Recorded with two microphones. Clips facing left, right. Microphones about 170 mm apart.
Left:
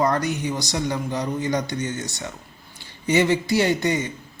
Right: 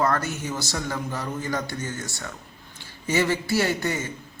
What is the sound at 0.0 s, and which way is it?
A man's voice, 15° left (ahead or behind).